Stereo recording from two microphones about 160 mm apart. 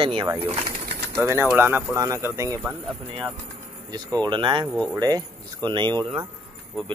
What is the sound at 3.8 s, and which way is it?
Speech, 25° right (ahead or behind).